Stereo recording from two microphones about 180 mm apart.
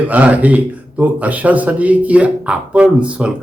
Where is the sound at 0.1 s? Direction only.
10° right (ahead or behind).